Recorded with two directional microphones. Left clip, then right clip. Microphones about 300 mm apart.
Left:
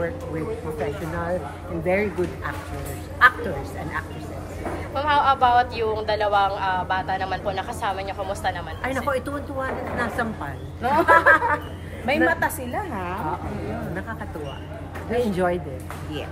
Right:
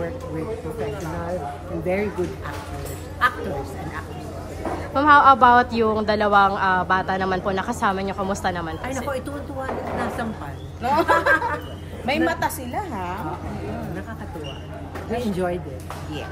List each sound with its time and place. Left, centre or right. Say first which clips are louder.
1.9 s a woman's voice: left 2 dB; centre
4.9 s a woman's voice: right 6 dB; right
8.8 s a woman's voice: left 7 dB; centre
15.0 s a woman's voice: left 3 dB; centre